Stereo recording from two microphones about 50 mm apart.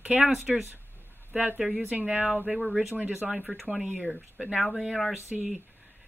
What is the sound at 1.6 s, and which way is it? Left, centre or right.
Speech, centre.